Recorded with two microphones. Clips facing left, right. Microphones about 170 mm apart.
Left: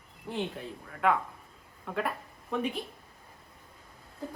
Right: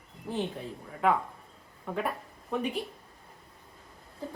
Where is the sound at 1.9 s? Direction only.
Centre (ahead or behind).